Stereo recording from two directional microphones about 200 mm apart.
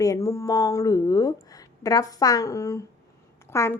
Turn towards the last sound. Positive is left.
turn(degrees=15)  # may be behind; listen again after turning